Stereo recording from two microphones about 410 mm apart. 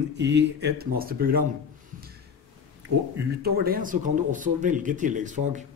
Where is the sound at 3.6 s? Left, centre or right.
Right.